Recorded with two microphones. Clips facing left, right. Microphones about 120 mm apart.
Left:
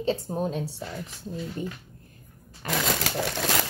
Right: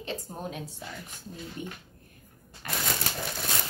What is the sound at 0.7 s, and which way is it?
Speech, 90° left.